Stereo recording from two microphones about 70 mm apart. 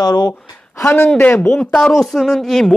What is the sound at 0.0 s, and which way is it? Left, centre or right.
Speech, left.